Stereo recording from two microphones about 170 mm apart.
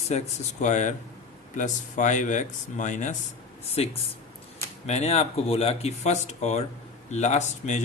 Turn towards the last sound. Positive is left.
turn(degrees=45)  # may be behind; listen again after turning